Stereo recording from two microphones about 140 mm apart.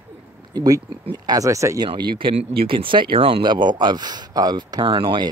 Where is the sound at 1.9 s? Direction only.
35° right (ahead or behind).